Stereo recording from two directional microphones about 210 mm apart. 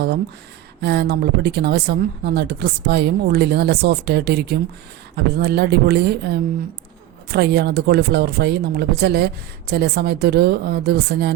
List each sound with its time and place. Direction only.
0.8 s speech: 50° right (ahead or behind)